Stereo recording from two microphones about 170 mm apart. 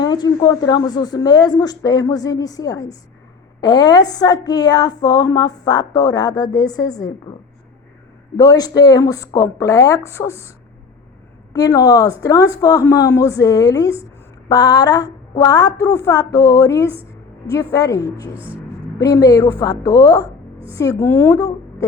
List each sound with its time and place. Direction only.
0.0 s a woman's voice: 25° left (ahead or behind)
8.4 s a woman's voice: 20° left (ahead or behind)
11.5 s a woman's voice: 20° left (ahead or behind)
16.9 s a sound: 10° right (ahead or behind)
17.5 s a woman's voice: 20° left (ahead or behind)